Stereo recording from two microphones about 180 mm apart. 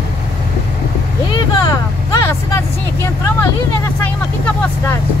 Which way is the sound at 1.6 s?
20° left (ahead or behind).